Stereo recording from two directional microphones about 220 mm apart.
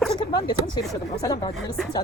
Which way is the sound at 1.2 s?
15° left (ahead or behind).